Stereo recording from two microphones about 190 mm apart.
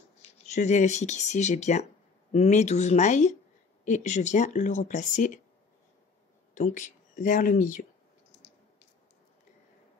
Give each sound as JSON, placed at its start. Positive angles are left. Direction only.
{"t": 0.5, "sound": "speech", "side_deg": 40}
{"t": 6.5, "sound": "speech", "side_deg": 40}